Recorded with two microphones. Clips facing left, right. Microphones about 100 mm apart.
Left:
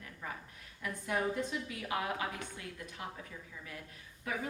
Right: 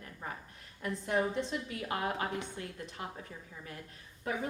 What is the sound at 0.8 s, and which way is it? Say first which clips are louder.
A woman's voice: right 3 dB; 30° right (ahead or behind).